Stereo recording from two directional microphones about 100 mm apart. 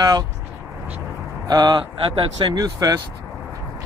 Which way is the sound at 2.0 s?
60° right (ahead or behind).